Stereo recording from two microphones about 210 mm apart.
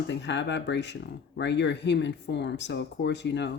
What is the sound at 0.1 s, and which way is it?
Speech, 60° left (ahead or behind).